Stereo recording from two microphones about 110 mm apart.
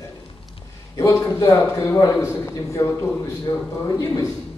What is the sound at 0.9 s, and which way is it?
Speech, 30° left (ahead or behind).